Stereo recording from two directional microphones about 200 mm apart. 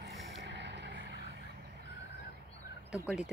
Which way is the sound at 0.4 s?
60° right (ahead or behind).